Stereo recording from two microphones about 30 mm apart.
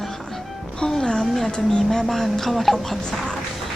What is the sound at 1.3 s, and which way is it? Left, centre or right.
Speech, centre.